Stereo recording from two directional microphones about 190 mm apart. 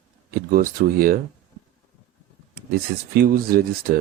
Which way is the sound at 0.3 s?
50° right (ahead or behind).